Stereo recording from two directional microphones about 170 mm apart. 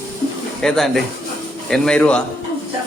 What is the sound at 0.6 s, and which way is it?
Speech, centre (ahead or behind).